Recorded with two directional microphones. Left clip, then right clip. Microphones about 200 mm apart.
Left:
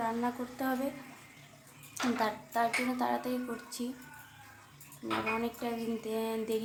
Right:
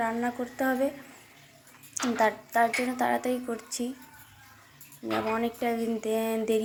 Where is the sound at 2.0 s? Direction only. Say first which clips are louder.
Right 6 dB; 20° right (ahead or behind).